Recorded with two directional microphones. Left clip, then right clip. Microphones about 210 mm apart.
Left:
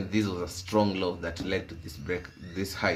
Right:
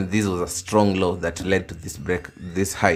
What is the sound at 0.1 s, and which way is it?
Speech, 50° right (ahead or behind).